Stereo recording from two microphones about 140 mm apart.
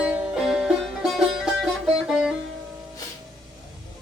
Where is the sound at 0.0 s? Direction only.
5° right (ahead or behind).